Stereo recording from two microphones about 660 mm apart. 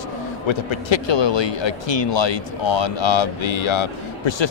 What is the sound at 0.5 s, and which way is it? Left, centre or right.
Speech, left.